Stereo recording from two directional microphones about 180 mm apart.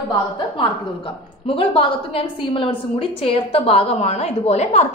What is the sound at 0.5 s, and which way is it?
A woman's voice, 30° left (ahead or behind).